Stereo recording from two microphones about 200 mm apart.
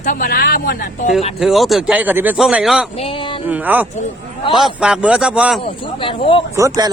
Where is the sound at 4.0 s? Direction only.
25° left (ahead or behind).